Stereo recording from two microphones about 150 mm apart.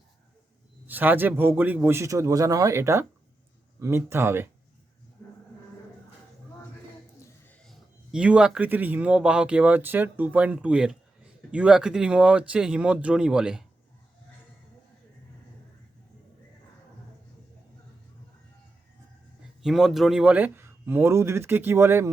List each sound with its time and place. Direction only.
0.9 s speech: 10° right (ahead or behind)
5.2 s a sound: 15° left (ahead or behind)
7.6 s speech: centre (ahead or behind)
19.6 s speech: centre (ahead or behind); by 22.1 s 15° right (ahead or behind)